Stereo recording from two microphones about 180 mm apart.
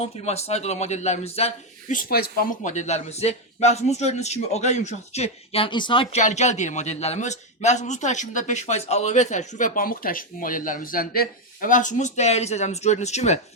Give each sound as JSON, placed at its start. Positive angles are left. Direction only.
{"t": 0.0, "sound": "speech", "side_deg": 35}